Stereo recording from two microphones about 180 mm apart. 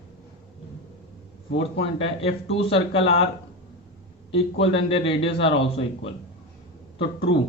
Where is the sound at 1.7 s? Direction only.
35° left (ahead or behind).